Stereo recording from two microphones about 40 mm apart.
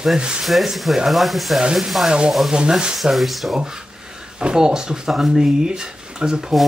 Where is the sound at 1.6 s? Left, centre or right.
Centre.